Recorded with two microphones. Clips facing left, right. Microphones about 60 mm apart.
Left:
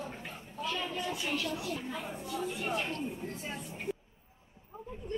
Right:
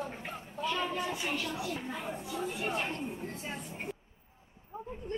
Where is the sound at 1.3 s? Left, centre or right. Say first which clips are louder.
Left 1 dB; centre.